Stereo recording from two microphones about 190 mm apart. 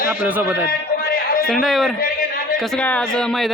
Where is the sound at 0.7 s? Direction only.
50° left (ahead or behind).